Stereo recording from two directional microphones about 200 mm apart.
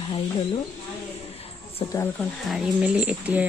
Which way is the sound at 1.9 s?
15° left (ahead or behind).